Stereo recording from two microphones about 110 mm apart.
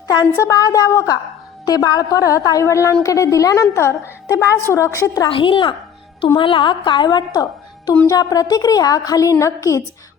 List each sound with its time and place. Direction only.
0.3 s a woman's voice: 30° left (ahead or behind)
5.3 s a woman's voice: 50° left (ahead or behind); by 9.8 s 30° left (ahead or behind)